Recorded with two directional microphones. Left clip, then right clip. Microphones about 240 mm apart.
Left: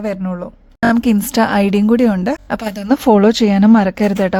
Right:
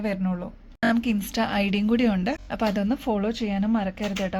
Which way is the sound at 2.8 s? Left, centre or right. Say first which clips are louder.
Left 15 dB; left.